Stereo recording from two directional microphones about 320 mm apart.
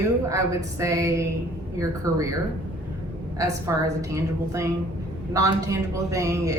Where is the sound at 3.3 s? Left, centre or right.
Centre.